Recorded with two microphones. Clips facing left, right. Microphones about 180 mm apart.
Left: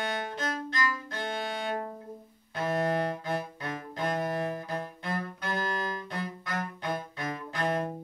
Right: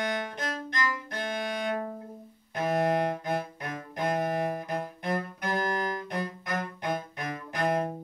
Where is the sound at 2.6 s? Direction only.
15° right (ahead or behind).